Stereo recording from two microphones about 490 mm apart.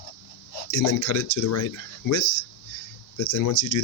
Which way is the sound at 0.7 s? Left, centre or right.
Left.